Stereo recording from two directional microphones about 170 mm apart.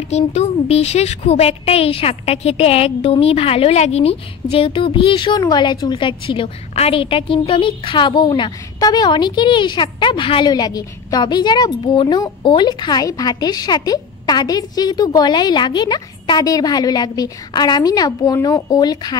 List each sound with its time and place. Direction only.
0.1 s a woman's voice: 40° left (ahead or behind); by 19.1 s 25° left (ahead or behind)